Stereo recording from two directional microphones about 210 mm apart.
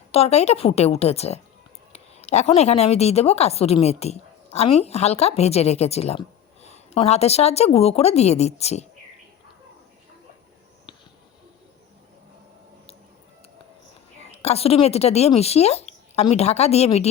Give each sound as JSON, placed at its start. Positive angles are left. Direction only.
{"t": 0.1, "sound": "a woman's voice", "side_deg": 30}
{"t": 14.3, "sound": "a woman's voice", "side_deg": 30}